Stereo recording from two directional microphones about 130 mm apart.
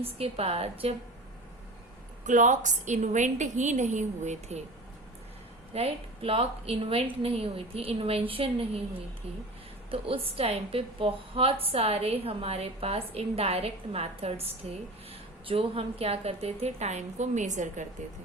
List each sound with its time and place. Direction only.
0.0 s a woman's voice: 50° right (ahead or behind)
2.2 s a woman's voice: 75° right (ahead or behind)
5.7 s a woman's voice: 50° right (ahead or behind)
9.9 s a woman's voice: 45° right (ahead or behind); by 17.8 s 70° right (ahead or behind)